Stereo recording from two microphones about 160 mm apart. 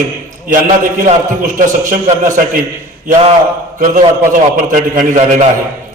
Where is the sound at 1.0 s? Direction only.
55° right (ahead or behind).